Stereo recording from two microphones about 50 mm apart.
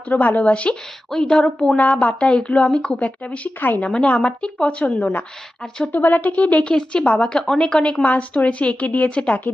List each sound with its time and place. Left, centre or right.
0.2 s a woman's voice: left
1.1 s a woman's voice: centre
1.8 s a woman's voice: left
3.6 s speech: left
3.8 s a woman's voice: left
5.9 s a woman's voice: left